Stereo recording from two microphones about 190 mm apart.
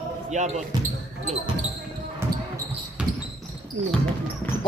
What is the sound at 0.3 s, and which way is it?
Speech, 35° right (ahead or behind).